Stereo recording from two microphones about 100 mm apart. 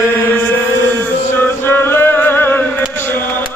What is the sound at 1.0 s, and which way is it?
Music, 20° left (ahead or behind).